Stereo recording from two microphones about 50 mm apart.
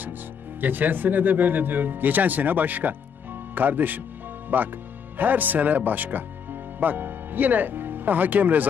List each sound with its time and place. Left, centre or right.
0.6 s speech: right